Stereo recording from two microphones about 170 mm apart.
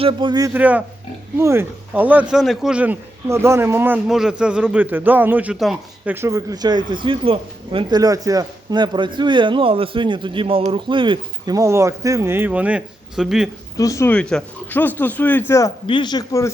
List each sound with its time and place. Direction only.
0.0 s a man's voice: 30° right (ahead or behind)
0.5 s speech: 10° right (ahead or behind)
6.1 s a man's voice: 15° right (ahead or behind)
13.7 s speech: 20° left (ahead or behind)
15.9 s speech: 25° left (ahead or behind)